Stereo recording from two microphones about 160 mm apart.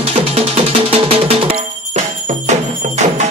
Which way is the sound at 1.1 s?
40° right (ahead or behind).